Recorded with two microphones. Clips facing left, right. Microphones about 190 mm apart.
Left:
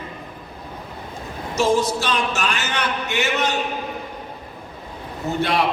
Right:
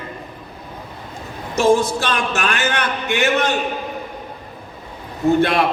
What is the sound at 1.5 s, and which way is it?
Speech, 50° right (ahead or behind).